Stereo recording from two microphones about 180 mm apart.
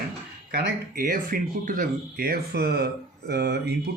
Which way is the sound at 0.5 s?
55° right (ahead or behind).